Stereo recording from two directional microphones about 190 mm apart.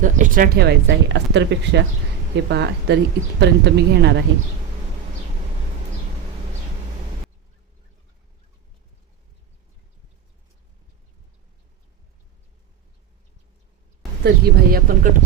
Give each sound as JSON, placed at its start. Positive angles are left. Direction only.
{"t": 0.0, "sound": "speech", "side_deg": -45}
{"t": 14.3, "sound": "speech", "side_deg": -50}